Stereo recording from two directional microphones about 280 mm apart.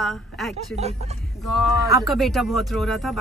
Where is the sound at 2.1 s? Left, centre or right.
Centre.